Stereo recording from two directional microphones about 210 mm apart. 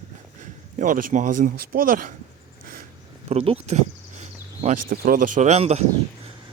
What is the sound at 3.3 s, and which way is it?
Speech, 30° right (ahead or behind).